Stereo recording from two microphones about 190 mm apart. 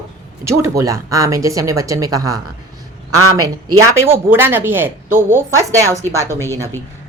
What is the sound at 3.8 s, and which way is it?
A woman's voice, 15° right (ahead or behind).